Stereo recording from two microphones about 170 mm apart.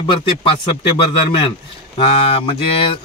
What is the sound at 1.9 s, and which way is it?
Speech, 35° left (ahead or behind).